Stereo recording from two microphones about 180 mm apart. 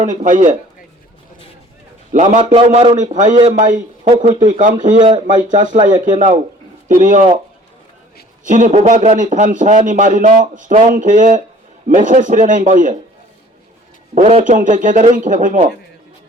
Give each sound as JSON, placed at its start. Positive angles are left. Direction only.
{"t": 0.0, "sound": "speech", "side_deg": -45}
{"t": 2.1, "sound": "speech", "side_deg": -40}
{"t": 2.4, "sound": "a man's voice", "side_deg": -30}
{"t": 4.9, "sound": "speech", "side_deg": -25}
{"t": 5.2, "sound": "speech", "side_deg": -45}
{"t": 8.4, "sound": "speech", "side_deg": -45}
{"t": 14.2, "sound": "speech", "side_deg": -40}